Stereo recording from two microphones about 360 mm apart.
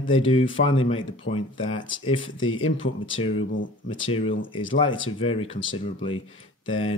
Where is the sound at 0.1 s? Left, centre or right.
Centre.